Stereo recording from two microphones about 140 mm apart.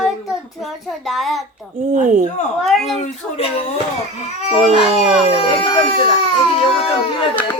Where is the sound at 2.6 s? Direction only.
Centre (ahead or behind).